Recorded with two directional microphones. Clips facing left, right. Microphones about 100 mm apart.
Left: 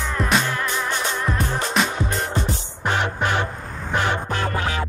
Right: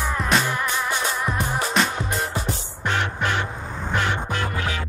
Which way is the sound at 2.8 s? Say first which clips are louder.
Left 2 dB; 20° left (ahead or behind).